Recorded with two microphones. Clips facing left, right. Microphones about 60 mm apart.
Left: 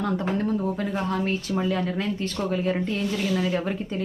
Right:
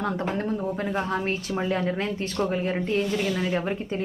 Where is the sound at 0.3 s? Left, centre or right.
Right.